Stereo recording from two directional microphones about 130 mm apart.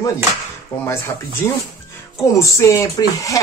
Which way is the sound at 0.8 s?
20° left (ahead or behind).